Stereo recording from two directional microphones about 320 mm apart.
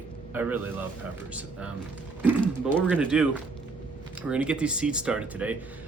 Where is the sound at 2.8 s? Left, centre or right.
Centre.